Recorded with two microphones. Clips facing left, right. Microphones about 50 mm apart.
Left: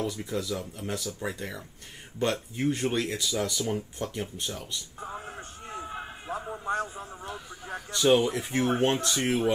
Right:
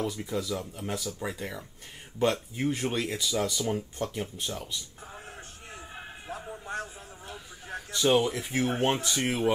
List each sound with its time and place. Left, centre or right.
0.0 s speech: centre
5.1 s music: left
5.9 s music: centre
6.2 s a sound: left
7.9 s speech: centre